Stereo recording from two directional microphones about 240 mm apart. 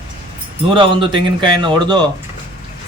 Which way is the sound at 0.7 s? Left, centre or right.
Right.